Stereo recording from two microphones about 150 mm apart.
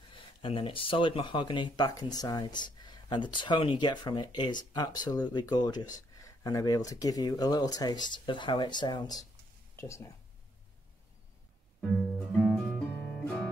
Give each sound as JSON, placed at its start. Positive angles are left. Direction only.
{"t": 0.1, "sound": "speech", "side_deg": 35}
{"t": 12.3, "sound": "music", "side_deg": 5}